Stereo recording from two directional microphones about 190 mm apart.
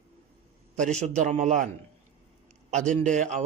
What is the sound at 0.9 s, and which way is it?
Speech, 40° right (ahead or behind).